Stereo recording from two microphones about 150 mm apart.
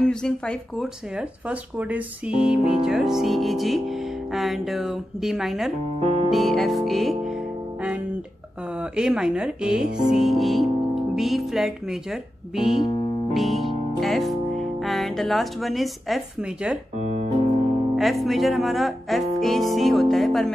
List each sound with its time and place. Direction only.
0.0 s music: 5° left (ahead or behind)
5.9 s music: 45° right (ahead or behind)
6.3 s music: centre (ahead or behind)
8.7 s music: 5° right (ahead or behind)
16.9 s music: 50° right (ahead or behind)
17.9 s music: centre (ahead or behind)